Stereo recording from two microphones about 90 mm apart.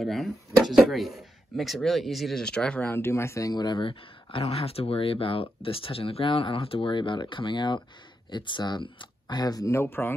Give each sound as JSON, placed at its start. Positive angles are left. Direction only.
{"t": 0.0, "sound": "speech", "side_deg": 0}
{"t": 2.8, "sound": "speech", "side_deg": 25}
{"t": 3.5, "sound": "speech", "side_deg": 60}